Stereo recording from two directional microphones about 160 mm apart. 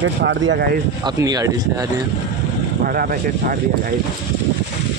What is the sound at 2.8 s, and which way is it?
Speech, 65° right (ahead or behind).